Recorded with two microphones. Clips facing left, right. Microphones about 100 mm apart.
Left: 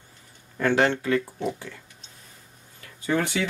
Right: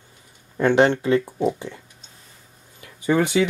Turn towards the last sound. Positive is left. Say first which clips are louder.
# right 6 dB
turn(degrees=-15)  # may be behind; listen again after turning